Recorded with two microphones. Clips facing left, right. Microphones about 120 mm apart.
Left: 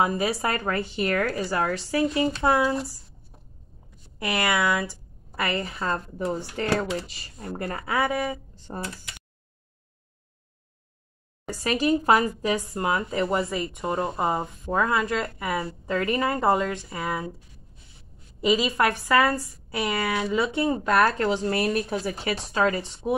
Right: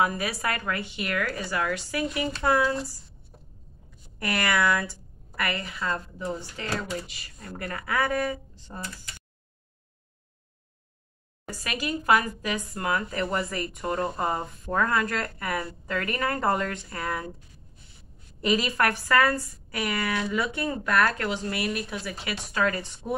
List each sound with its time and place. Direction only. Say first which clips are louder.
0.0 s a woman's voice: left 3 dB; 25° left (ahead or behind)
4.2 s a woman's voice: left 1 dB; 20° left (ahead or behind)
6.6 s speech: left 8 dB; 65° left (ahead or behind)
7.1 s speech: left 6 dB; 30° left (ahead or behind)
8.7 s a woman's voice: left 5 dB; 40° left (ahead or behind)
11.4 s speech: left 8 dB; 30° left (ahead or behind); by 17.4 s 10° left (ahead or behind)
18.4 s speech: left 2 dB; 15° left (ahead or behind)